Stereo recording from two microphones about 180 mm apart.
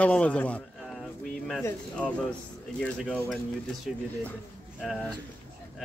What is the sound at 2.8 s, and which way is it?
Speech, 5° left (ahead or behind).